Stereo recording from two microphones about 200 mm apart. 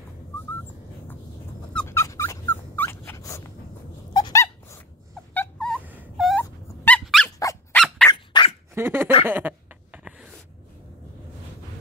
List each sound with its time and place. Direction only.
1.7 s dog: 10° left (ahead or behind)
5.9 s dog: 5° right (ahead or behind)
6.8 s squeak: 5° left (ahead or behind)
7.2 s squeak: 15° left (ahead or behind)
7.7 s a sound: 5° left (ahead or behind)
8.1 s dog: 20° left (ahead or behind)
8.7 s dog: 10° right (ahead or behind)
9.2 s a sound: 10° right (ahead or behind)